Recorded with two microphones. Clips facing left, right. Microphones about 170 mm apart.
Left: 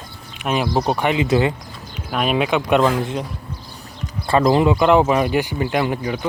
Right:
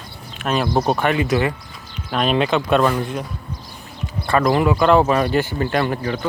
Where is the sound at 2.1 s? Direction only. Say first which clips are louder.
Right 1 dB; 10° left (ahead or behind).